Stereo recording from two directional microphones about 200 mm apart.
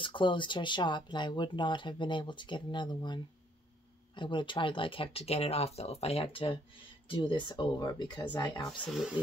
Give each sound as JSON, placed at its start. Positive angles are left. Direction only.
{"t": 0.0, "sound": "speech", "side_deg": 25}
{"t": 8.8, "sound": "speech", "side_deg": 0}